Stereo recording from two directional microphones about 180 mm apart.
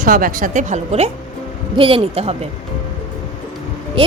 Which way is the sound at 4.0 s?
30° right (ahead or behind).